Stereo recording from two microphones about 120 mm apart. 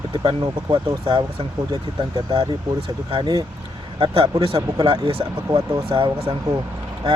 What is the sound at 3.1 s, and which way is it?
Speech, 40° right (ahead or behind).